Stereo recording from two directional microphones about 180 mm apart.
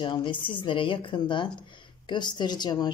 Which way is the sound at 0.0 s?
25° left (ahead or behind).